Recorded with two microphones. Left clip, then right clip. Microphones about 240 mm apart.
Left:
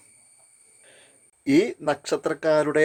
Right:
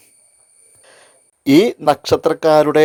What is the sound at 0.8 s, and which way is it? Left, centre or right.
Speech, right.